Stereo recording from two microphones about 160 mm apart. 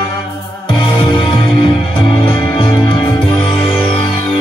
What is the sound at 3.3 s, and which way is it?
Music, 10° left (ahead or behind).